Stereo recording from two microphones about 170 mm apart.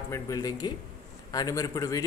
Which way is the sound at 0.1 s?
20° left (ahead or behind).